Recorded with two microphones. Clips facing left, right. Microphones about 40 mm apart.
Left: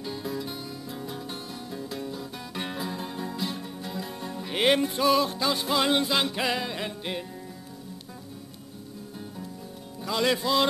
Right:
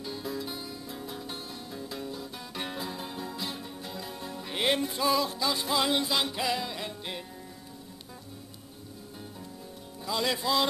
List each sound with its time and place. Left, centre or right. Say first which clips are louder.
0.0 s music: left 3 dB; centre
4.6 s music: left 5 dB; left
6.8 s music: left 5 dB; left
10.0 s music: left 4 dB; left